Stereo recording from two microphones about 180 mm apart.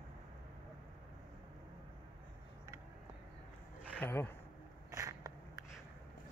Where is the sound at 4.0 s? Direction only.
10° left (ahead or behind).